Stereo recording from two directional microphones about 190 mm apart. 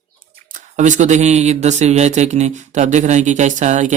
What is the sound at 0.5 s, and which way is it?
Speech, 40° right (ahead or behind).